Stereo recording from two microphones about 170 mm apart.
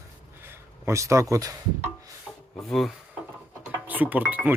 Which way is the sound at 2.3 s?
Centre (ahead or behind).